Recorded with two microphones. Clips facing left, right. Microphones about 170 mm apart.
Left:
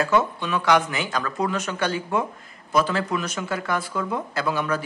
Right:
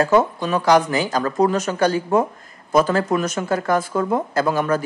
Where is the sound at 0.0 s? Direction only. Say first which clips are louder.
Right 5 dB; 40° right (ahead or behind).